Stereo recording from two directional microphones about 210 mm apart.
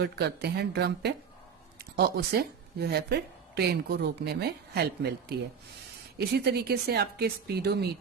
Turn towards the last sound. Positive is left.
turn(degrees=-50)  # may be behind; listen again after turning